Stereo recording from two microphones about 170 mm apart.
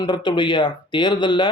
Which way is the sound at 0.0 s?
25° left (ahead or behind).